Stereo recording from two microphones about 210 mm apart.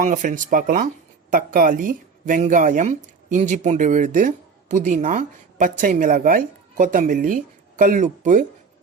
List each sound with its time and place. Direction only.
0.0 s speech: 40° right (ahead or behind)